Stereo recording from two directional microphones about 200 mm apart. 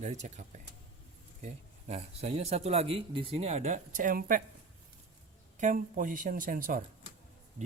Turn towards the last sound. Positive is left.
turn(degrees=-45)  # may be behind; listen again after turning